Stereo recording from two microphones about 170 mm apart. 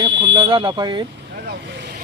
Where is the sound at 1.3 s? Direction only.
90° right.